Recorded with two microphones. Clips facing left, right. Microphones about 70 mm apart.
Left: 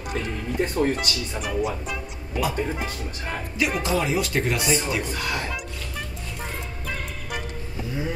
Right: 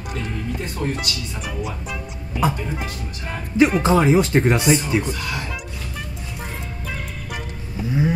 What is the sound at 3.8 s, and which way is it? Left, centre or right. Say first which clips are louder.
Speech: right 8 dB; right.